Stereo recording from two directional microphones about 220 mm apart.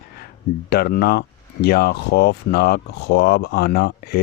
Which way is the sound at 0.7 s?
45° left (ahead or behind).